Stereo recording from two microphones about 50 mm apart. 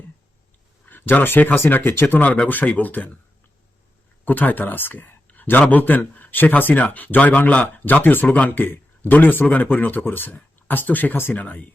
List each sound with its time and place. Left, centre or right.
0.9 s speech: left
4.3 s a man's voice: left